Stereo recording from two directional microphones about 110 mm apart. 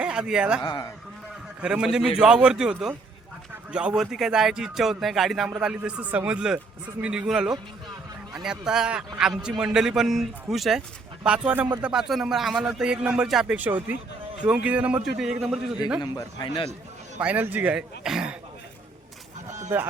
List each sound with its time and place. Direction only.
0.0 s a man's voice: 5° right (ahead or behind)
0.6 s a man's voice: 35° left (ahead or behind)
1.6 s a man's voice: 10° right (ahead or behind)
15.0 s speech: centre (ahead or behind)
16.0 s a man's voice: 40° left (ahead or behind)
17.2 s a man's voice: 15° right (ahead or behind)